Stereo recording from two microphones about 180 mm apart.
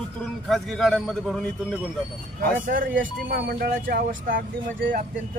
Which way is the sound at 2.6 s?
50° right (ahead or behind).